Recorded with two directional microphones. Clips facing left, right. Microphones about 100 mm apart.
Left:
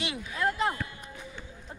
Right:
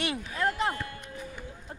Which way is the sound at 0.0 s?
40° right (ahead or behind).